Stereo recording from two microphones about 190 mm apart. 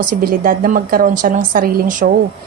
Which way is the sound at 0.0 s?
50° right (ahead or behind).